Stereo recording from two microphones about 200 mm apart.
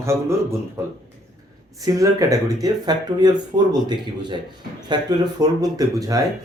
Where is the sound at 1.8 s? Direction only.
15° right (ahead or behind).